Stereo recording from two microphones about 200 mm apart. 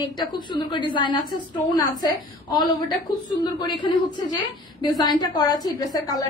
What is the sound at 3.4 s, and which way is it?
A woman's voice, 25° left (ahead or behind).